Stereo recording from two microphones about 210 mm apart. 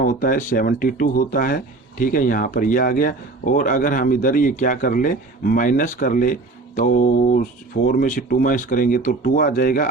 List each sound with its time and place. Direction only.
0.0 s speech: 40° left (ahead or behind)